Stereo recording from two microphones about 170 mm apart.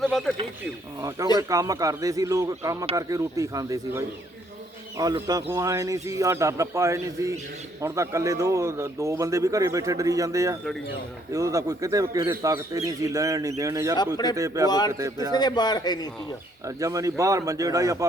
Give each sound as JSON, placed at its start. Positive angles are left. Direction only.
{"t": 0.0, "sound": "speech", "side_deg": 0}
{"t": 1.4, "sound": "speech", "side_deg": -20}
{"t": 14.7, "sound": "a man's voice", "side_deg": 25}
{"t": 14.9, "sound": "speech", "side_deg": -20}
{"t": 15.3, "sound": "a man's voice", "side_deg": 25}
{"t": 16.6, "sound": "speech", "side_deg": -20}